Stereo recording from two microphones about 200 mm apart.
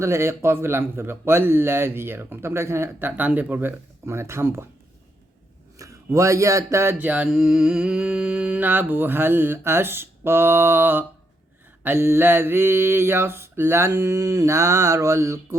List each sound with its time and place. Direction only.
0.0 s mantra: 15° right (ahead or behind)
5.7 s mantra: 15° right (ahead or behind)